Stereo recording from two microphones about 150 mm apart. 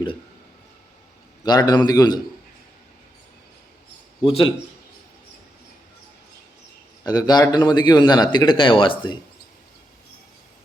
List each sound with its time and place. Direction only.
1.5 s speech: 25° left (ahead or behind)
4.2 s a man's voice: 35° left (ahead or behind)
7.0 s speech: 25° left (ahead or behind)